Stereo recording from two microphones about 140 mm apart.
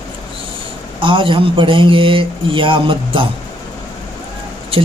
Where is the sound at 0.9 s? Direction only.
40° right (ahead or behind).